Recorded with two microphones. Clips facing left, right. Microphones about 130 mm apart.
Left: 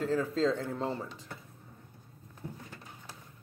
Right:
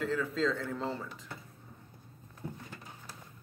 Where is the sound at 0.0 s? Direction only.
35° left (ahead or behind).